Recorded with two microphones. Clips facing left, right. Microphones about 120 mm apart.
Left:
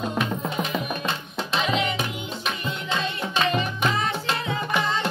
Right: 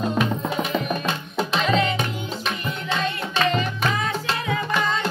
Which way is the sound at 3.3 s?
15° left (ahead or behind).